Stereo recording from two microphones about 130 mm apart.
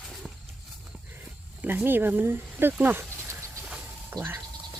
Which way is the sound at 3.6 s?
10° right (ahead or behind).